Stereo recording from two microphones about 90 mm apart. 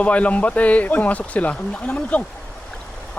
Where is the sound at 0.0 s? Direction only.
15° left (ahead or behind).